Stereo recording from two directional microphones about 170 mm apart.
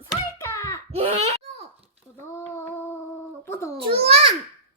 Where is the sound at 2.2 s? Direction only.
15° left (ahead or behind).